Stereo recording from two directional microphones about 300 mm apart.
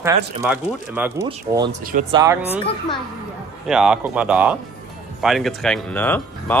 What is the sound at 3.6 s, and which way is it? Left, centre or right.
A man's voice, centre.